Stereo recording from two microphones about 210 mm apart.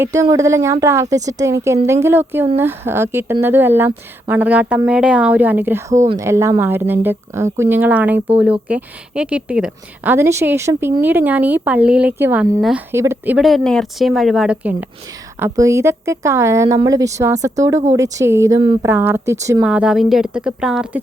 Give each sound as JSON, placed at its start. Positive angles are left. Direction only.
{"t": 0.0, "sound": "speech", "side_deg": -15}